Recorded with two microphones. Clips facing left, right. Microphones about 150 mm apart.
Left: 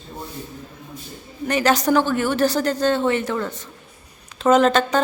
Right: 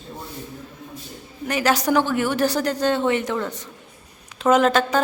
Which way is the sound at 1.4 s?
10° right (ahead or behind).